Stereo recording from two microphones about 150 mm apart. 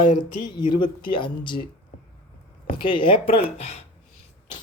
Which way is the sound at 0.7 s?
35° left (ahead or behind).